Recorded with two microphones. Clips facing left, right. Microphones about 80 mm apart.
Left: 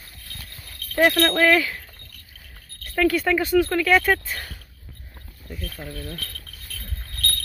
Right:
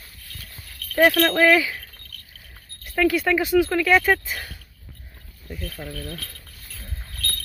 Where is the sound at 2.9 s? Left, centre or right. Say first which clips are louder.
Even; centre.